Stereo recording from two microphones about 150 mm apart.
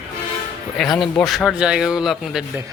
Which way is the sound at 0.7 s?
Centre (ahead or behind).